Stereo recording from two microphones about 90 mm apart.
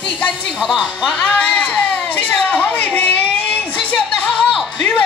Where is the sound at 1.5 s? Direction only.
15° left (ahead or behind).